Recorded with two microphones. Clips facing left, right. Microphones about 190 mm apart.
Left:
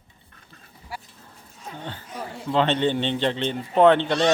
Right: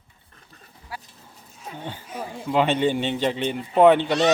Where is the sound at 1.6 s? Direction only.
10° right (ahead or behind).